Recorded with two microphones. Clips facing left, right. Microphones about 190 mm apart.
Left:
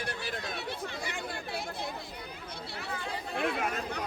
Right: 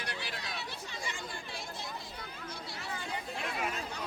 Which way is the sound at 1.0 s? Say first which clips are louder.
Left 4 dB; 60° left (ahead or behind).